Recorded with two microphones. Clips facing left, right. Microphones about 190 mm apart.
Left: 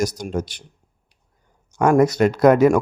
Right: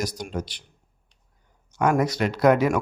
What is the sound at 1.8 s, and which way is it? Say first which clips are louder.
Speech: left 7 dB; 45° left (ahead or behind).